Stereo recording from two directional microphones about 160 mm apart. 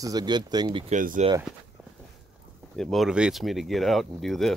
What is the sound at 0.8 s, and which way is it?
Speech, 50° right (ahead or behind).